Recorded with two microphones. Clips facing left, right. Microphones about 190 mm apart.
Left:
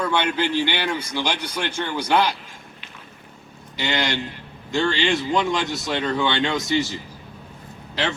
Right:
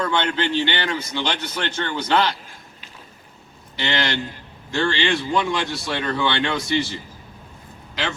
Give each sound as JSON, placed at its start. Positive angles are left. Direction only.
{"t": 0.0, "sound": "a man's voice", "side_deg": 10}
{"t": 3.8, "sound": "a man's voice", "side_deg": 15}